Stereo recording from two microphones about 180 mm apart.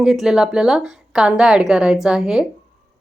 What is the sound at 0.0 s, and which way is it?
A woman's voice, 5° right (ahead or behind).